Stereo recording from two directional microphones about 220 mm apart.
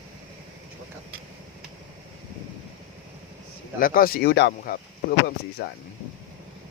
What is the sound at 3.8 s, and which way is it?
Speech, 40° left (ahead or behind).